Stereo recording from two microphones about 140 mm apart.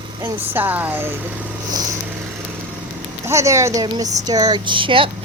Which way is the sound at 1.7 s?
30° right (ahead or behind).